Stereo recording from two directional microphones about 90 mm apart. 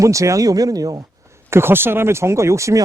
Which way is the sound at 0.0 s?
35° right (ahead or behind).